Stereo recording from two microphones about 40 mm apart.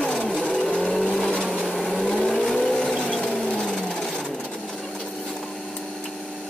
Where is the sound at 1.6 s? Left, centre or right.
Centre.